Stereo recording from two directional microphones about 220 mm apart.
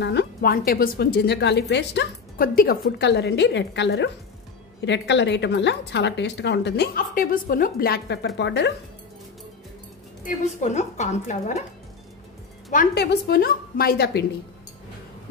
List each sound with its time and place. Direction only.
0.0 s a woman's voice: 50° left (ahead or behind)
10.2 s a woman's voice: 30° left (ahead or behind)
12.7 s a woman's voice: 50° left (ahead or behind)